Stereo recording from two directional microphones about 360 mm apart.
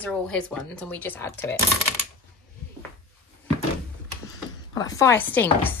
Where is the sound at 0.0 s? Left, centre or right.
Centre.